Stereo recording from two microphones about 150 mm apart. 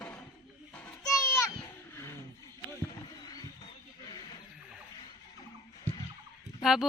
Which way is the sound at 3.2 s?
25° left (ahead or behind).